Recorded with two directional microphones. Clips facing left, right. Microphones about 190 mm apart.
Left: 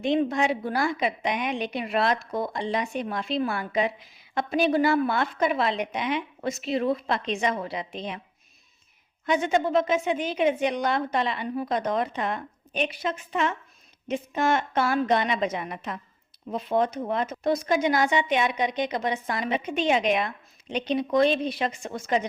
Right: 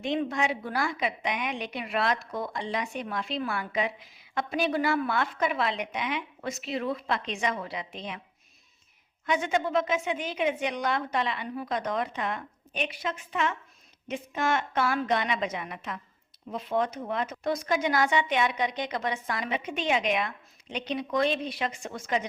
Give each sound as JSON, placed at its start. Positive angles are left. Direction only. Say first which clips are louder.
{"t": 0.0, "sound": "a woman's voice", "louder": "left 5 dB", "side_deg": 30}
{"t": 9.2, "sound": "a woman's voice", "louder": "left 4 dB", "side_deg": 30}